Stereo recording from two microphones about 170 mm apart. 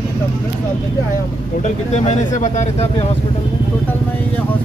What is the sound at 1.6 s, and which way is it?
Speech, 40° left (ahead or behind).